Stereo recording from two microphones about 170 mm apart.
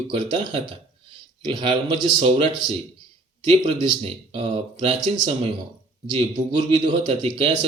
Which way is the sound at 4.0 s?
35° right (ahead or behind).